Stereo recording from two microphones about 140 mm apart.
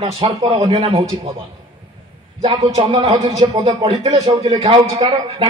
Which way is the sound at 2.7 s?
45° right (ahead or behind).